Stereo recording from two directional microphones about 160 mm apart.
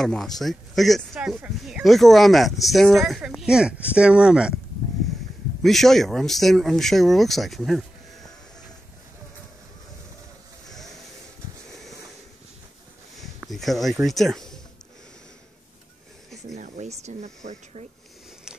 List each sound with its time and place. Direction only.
0.0 s speech: 5° left (ahead or behind)
5.6 s speech: centre (ahead or behind)
13.2 s a sound: centre (ahead or behind)
14.0 s speech: centre (ahead or behind)
16.5 s speech: 45° right (ahead or behind)